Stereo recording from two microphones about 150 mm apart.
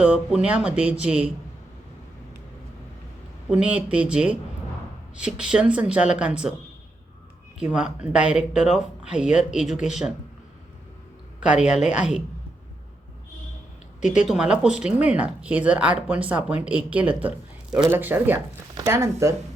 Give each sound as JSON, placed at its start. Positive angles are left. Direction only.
{"t": 0.0, "sound": "speech", "side_deg": -5}
{"t": 3.5, "sound": "speech", "side_deg": -10}
{"t": 7.6, "sound": "speech", "side_deg": -5}
{"t": 11.3, "sound": "speech", "side_deg": -5}
{"t": 14.2, "sound": "speech", "side_deg": -5}
{"t": 18.3, "sound": "speech", "side_deg": -25}